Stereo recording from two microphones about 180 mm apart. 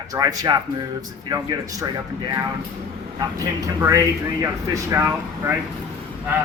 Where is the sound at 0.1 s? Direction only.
20° right (ahead or behind).